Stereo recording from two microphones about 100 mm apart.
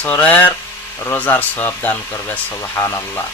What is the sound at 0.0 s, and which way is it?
Speech, 15° left (ahead or behind).